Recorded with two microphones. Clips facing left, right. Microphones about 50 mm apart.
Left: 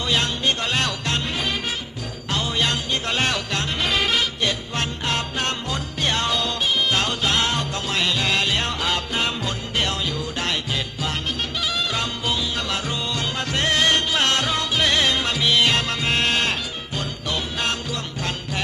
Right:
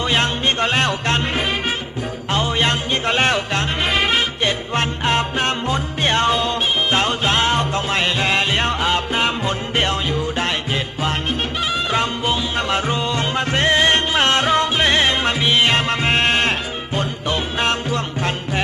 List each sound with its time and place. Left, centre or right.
0.1 s music: right
2.3 s music: right
11.7 s music: right